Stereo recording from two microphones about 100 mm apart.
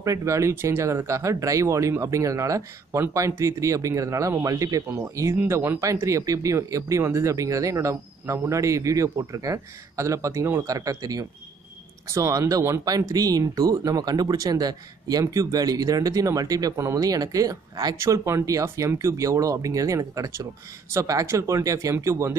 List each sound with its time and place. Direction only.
0.0 s speech: 30° right (ahead or behind)